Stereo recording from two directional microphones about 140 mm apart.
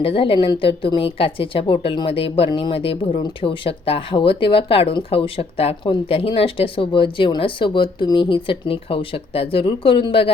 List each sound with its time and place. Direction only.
0.0 s a woman's voice: 40° left (ahead or behind)